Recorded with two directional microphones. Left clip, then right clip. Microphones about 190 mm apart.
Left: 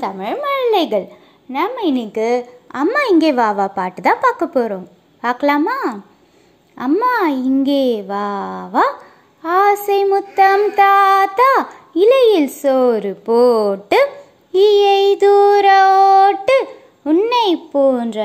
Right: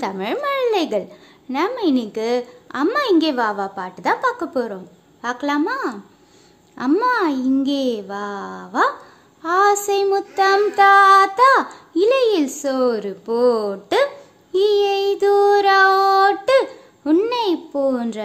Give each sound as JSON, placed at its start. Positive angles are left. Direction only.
{"t": 0.0, "sound": "a woman's voice", "side_deg": -5}
{"t": 6.7, "sound": "a woman's voice", "side_deg": 10}
{"t": 17.4, "sound": "a woman's voice", "side_deg": 15}